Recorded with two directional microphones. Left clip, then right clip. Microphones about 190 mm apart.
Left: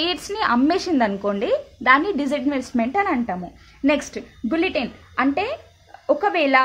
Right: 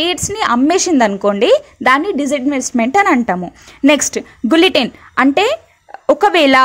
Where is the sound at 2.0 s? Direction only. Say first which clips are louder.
Right 6 dB; 25° right (ahead or behind); by 6.6 s 45° right (ahead or behind).